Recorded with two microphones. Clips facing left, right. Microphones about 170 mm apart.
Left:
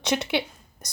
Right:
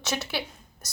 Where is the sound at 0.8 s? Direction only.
15° left (ahead or behind).